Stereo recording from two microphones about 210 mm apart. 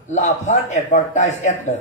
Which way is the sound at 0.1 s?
35° left (ahead or behind).